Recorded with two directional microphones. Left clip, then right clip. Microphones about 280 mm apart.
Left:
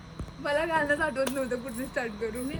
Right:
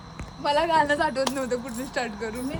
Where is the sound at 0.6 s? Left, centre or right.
Right.